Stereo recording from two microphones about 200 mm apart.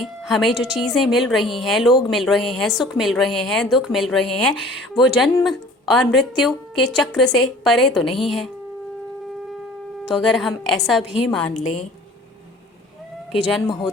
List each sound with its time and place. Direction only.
0.0 s speech: centre (ahead or behind)
10.1 s speech: centre (ahead or behind)
11.5 s a woman's voice: 35° left (ahead or behind)
13.3 s speech: centre (ahead or behind)